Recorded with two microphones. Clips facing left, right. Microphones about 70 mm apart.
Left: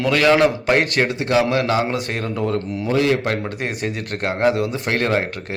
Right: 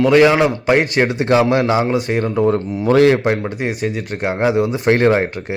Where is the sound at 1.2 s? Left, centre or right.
Right.